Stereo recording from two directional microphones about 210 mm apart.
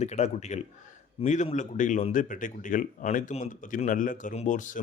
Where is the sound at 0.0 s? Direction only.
30° left (ahead or behind).